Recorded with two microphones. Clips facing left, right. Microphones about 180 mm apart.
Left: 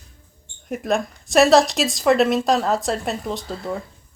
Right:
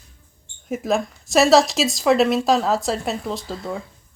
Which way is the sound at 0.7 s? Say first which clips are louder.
Right 1 dB; centre (ahead or behind).